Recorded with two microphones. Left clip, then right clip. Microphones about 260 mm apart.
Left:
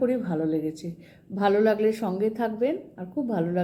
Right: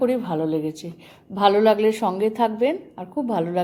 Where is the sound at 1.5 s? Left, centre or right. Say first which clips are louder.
Right 5 dB; centre.